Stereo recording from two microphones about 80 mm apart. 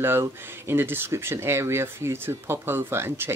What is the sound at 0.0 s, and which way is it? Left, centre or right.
Speech, right.